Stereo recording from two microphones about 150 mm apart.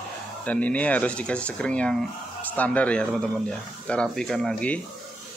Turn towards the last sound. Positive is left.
turn(degrees=5)  # may be behind; listen again after turning